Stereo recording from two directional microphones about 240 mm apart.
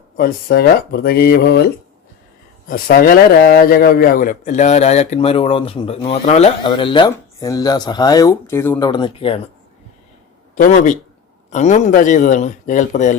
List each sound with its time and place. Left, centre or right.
0.2 s speech: left
2.6 s a man's voice: left
10.5 s speech: left